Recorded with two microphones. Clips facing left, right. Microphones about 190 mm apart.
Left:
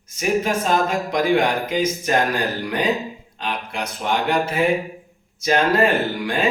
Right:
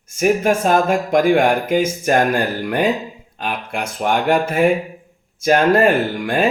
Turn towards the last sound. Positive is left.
turn(degrees=-55)  # may be behind; listen again after turning